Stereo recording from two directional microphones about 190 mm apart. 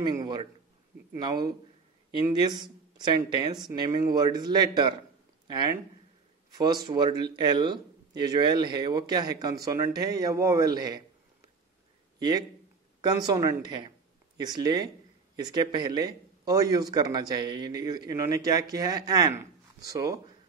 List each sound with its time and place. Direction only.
0.0 s speech: 20° right (ahead or behind)
6.6 s speech: 20° right (ahead or behind)
12.2 s a man's voice: 20° right (ahead or behind)